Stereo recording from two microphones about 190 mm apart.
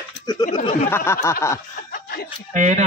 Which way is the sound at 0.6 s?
35° left (ahead or behind).